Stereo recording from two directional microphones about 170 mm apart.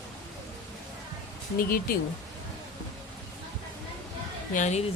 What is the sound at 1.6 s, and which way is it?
Speech, 60° left (ahead or behind).